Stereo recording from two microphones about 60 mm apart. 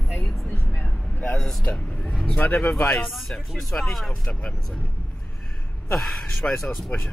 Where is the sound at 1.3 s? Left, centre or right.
Centre.